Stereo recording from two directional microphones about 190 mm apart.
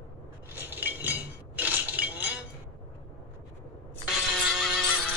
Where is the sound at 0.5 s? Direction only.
10° right (ahead or behind).